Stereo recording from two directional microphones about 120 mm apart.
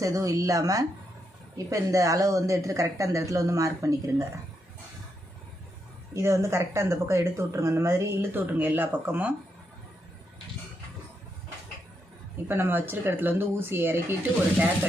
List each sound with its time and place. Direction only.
0.0 s speech: 25° right (ahead or behind)
6.1 s speech: 25° right (ahead or behind)
12.5 s speech: 20° right (ahead or behind)